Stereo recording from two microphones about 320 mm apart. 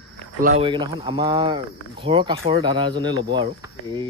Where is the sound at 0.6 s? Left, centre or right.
Centre.